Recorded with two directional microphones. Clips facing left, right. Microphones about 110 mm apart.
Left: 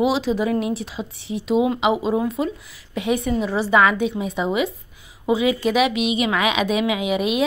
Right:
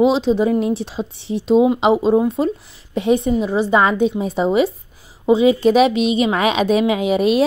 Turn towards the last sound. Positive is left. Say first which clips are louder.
# right 6 dB
turn(degrees=-35)  # may be behind; listen again after turning